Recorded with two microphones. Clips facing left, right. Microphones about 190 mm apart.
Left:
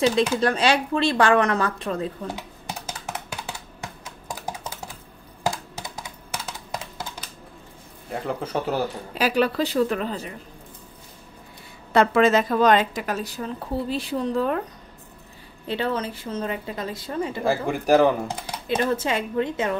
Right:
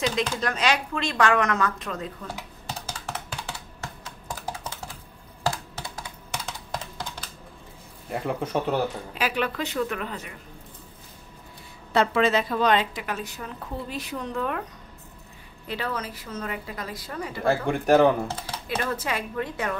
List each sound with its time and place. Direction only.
0.4 s a woman's voice: 30° left (ahead or behind)
2.9 s music: 10° left (ahead or behind)
3.8 s typing: 15° left (ahead or behind)
6.3 s computer keyboard: 5° left (ahead or behind)
8.1 s speech: centre (ahead or behind)
9.1 s a woman's voice: 35° left (ahead or behind)
11.9 s a woman's voice: 50° left (ahead or behind); by 14.6 s 35° left (ahead or behind)
15.6 s a woman's voice: 30° left (ahead or behind)
17.5 s speech: centre (ahead or behind)
18.7 s a woman's voice: 25° left (ahead or behind)